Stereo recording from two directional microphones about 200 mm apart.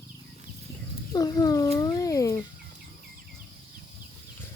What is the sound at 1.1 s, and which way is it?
Speech, 20° left (ahead or behind).